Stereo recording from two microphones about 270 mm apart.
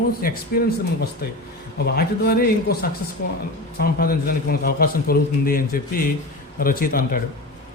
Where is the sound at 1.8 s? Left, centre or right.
Left.